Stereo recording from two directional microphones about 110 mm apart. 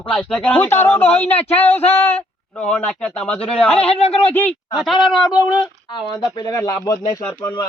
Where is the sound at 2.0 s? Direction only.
15° left (ahead or behind).